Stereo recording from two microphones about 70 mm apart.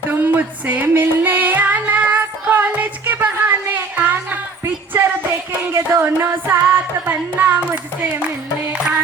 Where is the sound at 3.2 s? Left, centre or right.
Right.